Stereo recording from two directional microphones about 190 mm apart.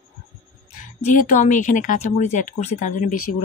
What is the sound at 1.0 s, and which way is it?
Speech, 45° left (ahead or behind).